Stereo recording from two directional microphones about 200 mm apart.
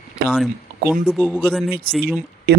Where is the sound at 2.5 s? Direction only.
55° right (ahead or behind).